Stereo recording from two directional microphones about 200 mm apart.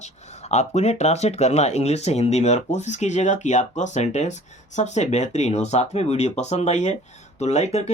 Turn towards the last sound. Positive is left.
turn(degrees=35)  # may be behind; listen again after turning